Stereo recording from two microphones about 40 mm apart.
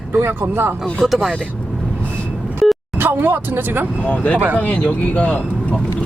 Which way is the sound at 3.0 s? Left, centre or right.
Right.